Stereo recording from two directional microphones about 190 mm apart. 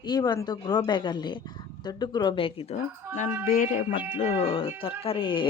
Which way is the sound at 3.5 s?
45° left (ahead or behind).